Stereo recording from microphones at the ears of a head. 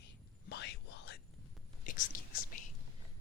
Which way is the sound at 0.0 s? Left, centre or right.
Left.